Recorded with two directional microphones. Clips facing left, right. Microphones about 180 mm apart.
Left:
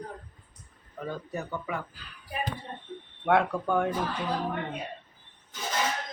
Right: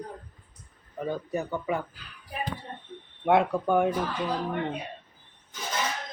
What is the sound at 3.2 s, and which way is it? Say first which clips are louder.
Speech: right 2 dB; 15° right (ahead or behind).